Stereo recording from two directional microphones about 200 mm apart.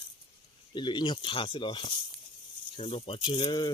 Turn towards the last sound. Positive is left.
turn(degrees=20)  # may be behind; listen again after turning